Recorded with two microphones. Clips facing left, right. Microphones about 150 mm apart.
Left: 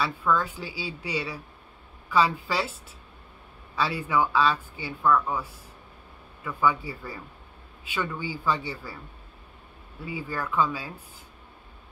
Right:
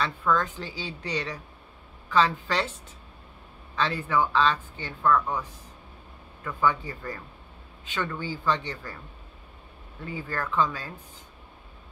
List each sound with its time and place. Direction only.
0.0 s speech: 10° left (ahead or behind)
3.7 s speech: 10° left (ahead or behind)
10.0 s speech: 10° left (ahead or behind)